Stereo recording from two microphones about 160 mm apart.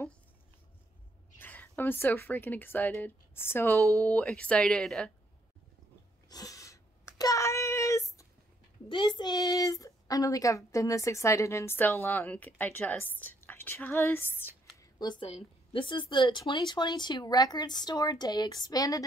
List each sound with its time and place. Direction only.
1.4 s speech: 10° left (ahead or behind)
6.2 s sneeze: 25° left (ahead or behind)
7.2 s a sound: 20° left (ahead or behind)
8.8 s speech: 30° left (ahead or behind); by 14.5 s 15° left (ahead or behind)
14.8 s a woman's voice: 25° left (ahead or behind)